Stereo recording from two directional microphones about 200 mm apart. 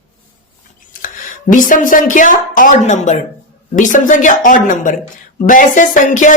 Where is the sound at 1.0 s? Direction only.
40° left (ahead or behind).